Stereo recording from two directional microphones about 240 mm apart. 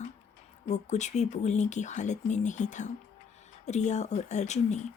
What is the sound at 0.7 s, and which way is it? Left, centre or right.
Speech, left.